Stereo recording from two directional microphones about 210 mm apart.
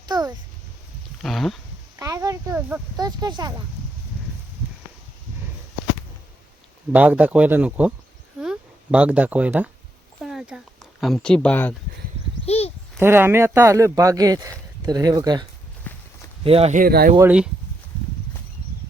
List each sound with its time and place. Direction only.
0.0 s a sound: 20° right (ahead or behind)
1.2 s a sound: centre (ahead or behind)
2.0 s speech: 15° right (ahead or behind)
3.0 s speech: 20° right (ahead or behind)
6.9 s speech: 5° right (ahead or behind)
8.4 s a sound: 5° right (ahead or behind)
11.0 s speech: centre (ahead or behind)
12.5 s a child's voice: 30° left (ahead or behind)
13.0 s speech: 10° right (ahead or behind)
15.9 s walk: 10° left (ahead or behind)
16.4 s speech: 30° right (ahead or behind); by 17.2 s 45° right (ahead or behind)
17.2 s speech: 5° right (ahead or behind)